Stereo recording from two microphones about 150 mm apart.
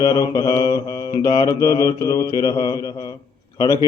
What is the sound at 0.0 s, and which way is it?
Speech, 25° left (ahead or behind).